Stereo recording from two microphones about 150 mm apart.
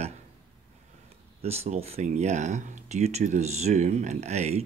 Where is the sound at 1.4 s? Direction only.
45° right (ahead or behind).